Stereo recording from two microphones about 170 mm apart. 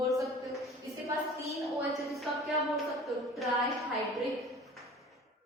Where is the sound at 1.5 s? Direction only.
Centre (ahead or behind).